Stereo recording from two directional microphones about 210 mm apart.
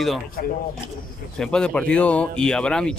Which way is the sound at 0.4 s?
45° left (ahead or behind).